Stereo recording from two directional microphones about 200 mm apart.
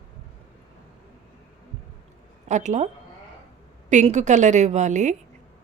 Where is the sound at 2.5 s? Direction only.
35° right (ahead or behind).